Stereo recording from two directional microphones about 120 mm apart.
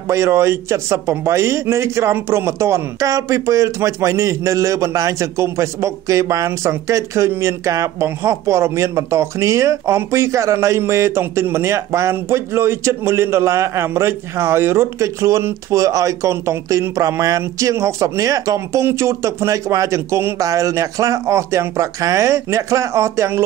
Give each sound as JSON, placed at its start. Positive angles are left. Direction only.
{"t": 0.1, "sound": "speech", "side_deg": -25}